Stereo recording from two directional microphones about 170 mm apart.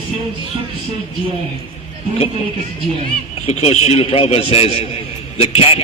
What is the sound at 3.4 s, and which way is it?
A man's voice, 40° left (ahead or behind).